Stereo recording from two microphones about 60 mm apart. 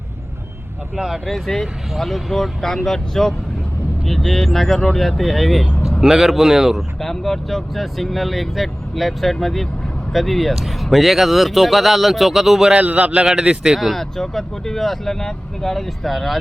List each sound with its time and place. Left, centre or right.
0.9 s a man's voice: centre
1.2 s speech: centre
7.0 s speech: centre
12.7 s a man's voice: right
13.2 s a man's voice: centre
13.7 s speech: centre